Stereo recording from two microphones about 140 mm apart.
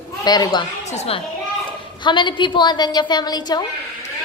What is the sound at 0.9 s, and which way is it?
Speech, 50° left (ahead or behind).